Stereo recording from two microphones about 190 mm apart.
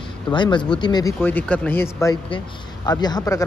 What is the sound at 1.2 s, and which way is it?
Speech, 10° left (ahead or behind).